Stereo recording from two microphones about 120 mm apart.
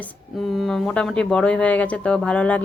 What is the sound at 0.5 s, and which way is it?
A woman's voice, centre (ahead or behind).